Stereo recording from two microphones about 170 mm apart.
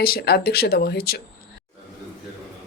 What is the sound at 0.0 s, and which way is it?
Speech, 65° left (ahead or behind).